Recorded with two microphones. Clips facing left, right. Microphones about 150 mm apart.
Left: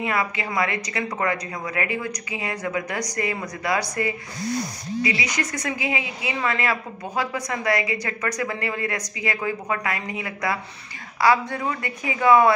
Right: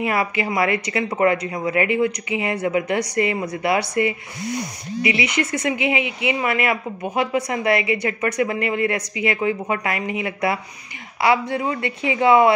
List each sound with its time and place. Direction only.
0.0 s a woman's voice: 25° right (ahead or behind)